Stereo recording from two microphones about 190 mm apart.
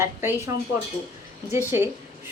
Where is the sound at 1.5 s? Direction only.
15° right (ahead or behind).